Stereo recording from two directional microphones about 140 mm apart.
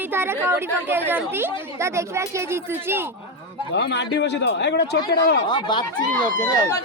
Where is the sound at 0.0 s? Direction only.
15° right (ahead or behind).